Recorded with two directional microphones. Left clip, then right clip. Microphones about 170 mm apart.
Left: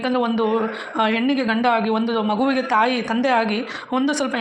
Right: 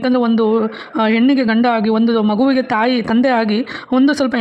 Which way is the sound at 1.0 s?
20° left (ahead or behind).